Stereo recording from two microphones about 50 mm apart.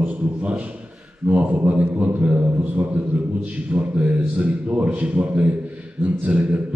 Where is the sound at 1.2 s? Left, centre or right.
Right.